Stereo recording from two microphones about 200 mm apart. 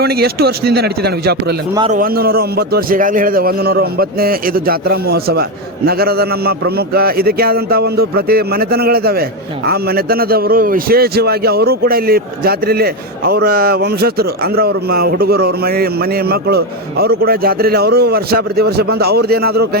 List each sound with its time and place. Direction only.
0.0 s a man's voice: 50° right (ahead or behind)